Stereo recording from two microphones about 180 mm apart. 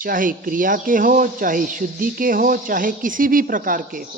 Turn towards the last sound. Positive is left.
turn(degrees=-50)  # may be behind; listen again after turning